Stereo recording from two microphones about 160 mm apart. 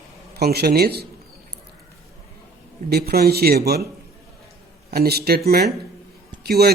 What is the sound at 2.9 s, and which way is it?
Speech, 75° right (ahead or behind).